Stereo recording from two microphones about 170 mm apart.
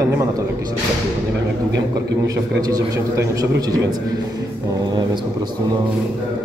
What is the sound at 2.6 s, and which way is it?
Speech, 20° right (ahead or behind).